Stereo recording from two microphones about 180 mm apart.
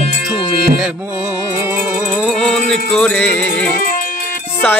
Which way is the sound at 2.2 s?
5° left (ahead or behind).